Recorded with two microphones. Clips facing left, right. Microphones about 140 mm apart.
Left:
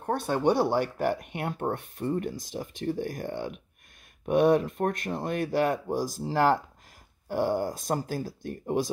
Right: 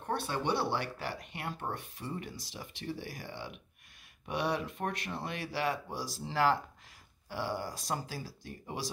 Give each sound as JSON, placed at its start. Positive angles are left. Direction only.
{"t": 0.0, "sound": "speech", "side_deg": 45}